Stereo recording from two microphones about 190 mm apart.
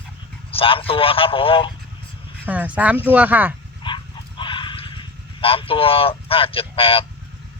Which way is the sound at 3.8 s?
25° left (ahead or behind).